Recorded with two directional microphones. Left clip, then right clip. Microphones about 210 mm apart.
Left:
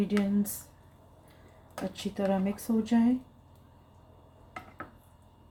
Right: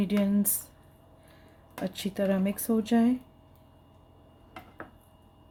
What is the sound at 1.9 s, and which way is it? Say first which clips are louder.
Speech: right 2 dB; 50° right (ahead or behind).